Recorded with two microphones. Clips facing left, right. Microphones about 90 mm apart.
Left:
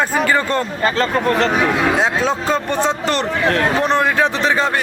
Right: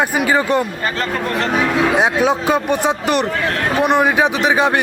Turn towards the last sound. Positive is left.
turn(degrees=-15)  # may be behind; listen again after turning